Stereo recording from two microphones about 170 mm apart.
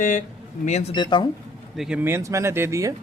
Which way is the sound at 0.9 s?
30° left (ahead or behind).